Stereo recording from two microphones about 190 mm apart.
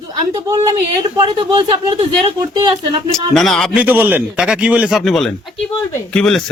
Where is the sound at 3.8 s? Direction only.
10° right (ahead or behind).